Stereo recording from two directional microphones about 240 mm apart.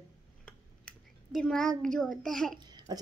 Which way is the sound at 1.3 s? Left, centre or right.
Centre.